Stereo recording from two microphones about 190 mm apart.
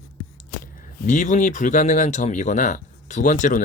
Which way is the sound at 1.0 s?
40° left (ahead or behind).